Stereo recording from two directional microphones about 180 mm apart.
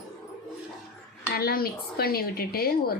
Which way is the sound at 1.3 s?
55° left (ahead or behind).